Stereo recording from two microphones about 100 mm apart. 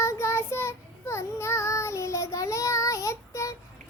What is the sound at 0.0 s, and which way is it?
Child singing, 30° left (ahead or behind).